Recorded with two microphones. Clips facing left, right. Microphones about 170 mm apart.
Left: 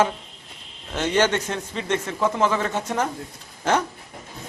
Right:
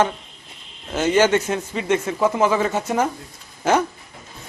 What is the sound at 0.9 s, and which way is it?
A man's voice, 5° right (ahead or behind).